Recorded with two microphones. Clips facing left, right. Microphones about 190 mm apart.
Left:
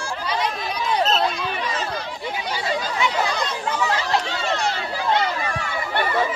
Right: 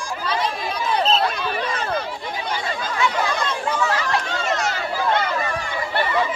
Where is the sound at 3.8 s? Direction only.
25° left (ahead or behind).